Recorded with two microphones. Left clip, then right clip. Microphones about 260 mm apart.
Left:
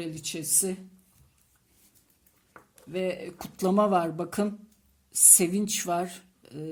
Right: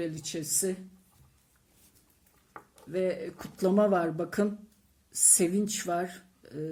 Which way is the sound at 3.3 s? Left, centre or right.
Left.